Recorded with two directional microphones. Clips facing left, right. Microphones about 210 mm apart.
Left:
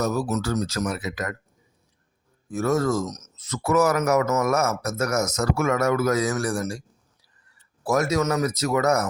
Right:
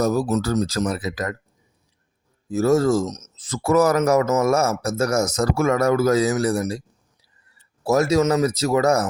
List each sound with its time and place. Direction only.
0.0 s speech: 35° right (ahead or behind)
2.5 s speech: 25° right (ahead or behind)
7.9 s speech: 30° right (ahead or behind)